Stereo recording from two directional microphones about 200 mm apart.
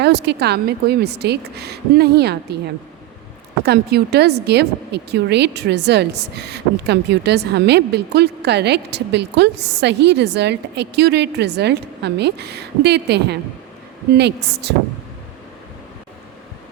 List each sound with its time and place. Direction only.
0.0 s speech: 55° right (ahead or behind)
3.6 s speech: 55° right (ahead or behind)